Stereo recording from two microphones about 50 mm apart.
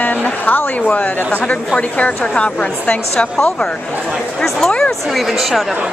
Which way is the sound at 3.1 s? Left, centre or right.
Centre.